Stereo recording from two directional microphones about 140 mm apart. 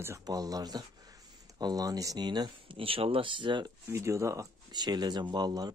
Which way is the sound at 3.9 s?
20° right (ahead or behind).